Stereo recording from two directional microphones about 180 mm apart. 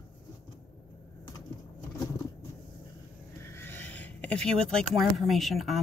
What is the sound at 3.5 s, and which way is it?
Speech, 10° left (ahead or behind).